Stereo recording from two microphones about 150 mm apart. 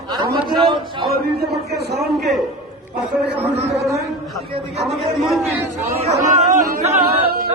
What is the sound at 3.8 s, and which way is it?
Speech, 20° right (ahead or behind).